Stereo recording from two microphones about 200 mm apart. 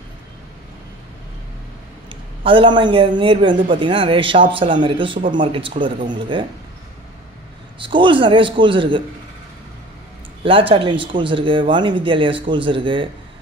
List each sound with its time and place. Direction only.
2.4 s a man's voice: 25° right (ahead or behind)
7.8 s a man's voice: 25° right (ahead or behind)
10.4 s a man's voice: 25° right (ahead or behind)